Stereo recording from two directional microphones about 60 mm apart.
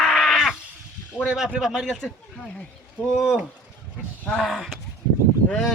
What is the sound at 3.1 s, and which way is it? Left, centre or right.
A man's voice, centre.